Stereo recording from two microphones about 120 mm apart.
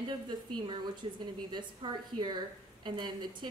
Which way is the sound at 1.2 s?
40° right (ahead or behind).